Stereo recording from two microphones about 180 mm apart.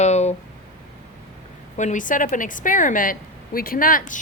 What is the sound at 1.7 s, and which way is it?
Speech, 45° left (ahead or behind).